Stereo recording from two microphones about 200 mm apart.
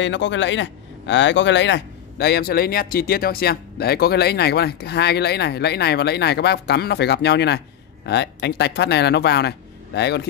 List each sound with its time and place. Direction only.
0.0 s speech: 65° left (ahead or behind)